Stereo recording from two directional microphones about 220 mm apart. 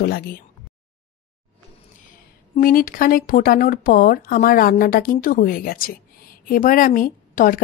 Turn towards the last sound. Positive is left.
turn(degrees=40)  # may be behind; listen again after turning